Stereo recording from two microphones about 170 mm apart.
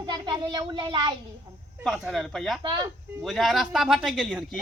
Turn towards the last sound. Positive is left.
turn(degrees=0)  # may be behind; listen again after turning